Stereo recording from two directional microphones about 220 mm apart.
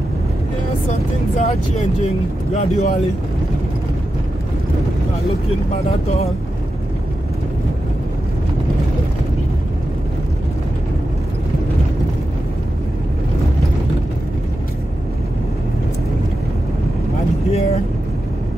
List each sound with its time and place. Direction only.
0.9 s vehicle: 30° left (ahead or behind)
2.5 s speech: 30° left (ahead or behind)
17.5 s speech: 30° left (ahead or behind)